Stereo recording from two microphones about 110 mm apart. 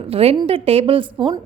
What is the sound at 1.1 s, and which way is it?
Speech, 45° right (ahead or behind).